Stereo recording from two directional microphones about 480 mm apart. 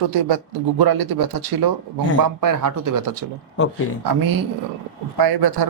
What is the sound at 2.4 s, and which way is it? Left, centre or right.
Speech, right.